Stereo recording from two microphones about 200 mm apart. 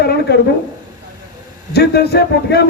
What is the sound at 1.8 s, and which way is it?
Speech, 55° left (ahead or behind).